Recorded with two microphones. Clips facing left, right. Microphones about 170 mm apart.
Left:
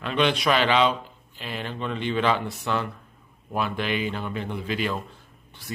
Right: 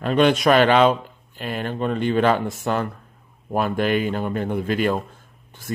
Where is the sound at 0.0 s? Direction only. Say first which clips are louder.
Right 6 dB; 45° right (ahead or behind).